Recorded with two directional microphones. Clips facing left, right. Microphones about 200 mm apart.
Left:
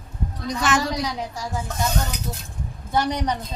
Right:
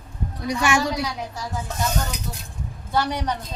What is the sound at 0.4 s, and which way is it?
Speech, 10° right (ahead or behind).